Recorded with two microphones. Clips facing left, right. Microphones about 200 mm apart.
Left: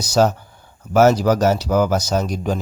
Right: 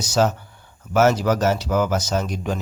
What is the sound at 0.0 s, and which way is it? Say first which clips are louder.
Speech: left 3 dB; 35° left (ahead or behind).